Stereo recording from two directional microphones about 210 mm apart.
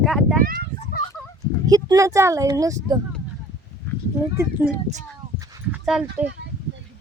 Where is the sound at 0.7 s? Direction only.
45° right (ahead or behind).